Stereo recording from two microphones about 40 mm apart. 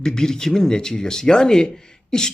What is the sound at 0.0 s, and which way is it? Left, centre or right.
Speech, centre.